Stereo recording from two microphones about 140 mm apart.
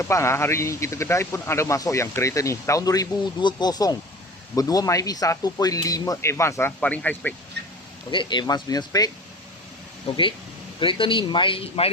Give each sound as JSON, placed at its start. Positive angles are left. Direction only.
{"t": 0.0, "sound": "speech", "side_deg": 20}
{"t": 8.1, "sound": "a man's voice", "side_deg": 35}
{"t": 10.1, "sound": "a man's voice", "side_deg": 35}